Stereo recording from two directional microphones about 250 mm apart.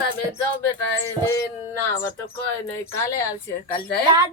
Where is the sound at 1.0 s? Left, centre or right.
Centre.